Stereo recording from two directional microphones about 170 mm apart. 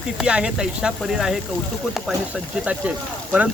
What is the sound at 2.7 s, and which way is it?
Speech, 10° right (ahead or behind).